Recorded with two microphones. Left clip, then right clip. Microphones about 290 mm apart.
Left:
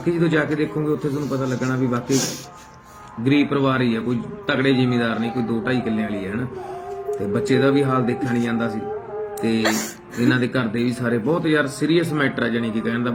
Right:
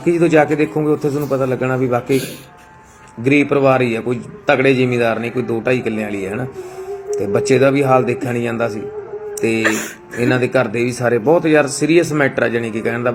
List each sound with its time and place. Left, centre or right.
0.0 s a man's voice: centre